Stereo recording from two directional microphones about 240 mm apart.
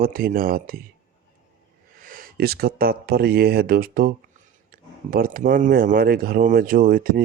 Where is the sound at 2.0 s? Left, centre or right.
Right.